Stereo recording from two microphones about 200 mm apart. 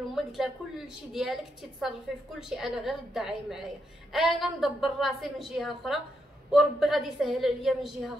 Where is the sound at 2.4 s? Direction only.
Centre (ahead or behind).